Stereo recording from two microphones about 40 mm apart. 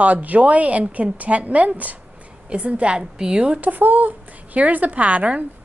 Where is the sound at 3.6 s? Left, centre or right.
Right.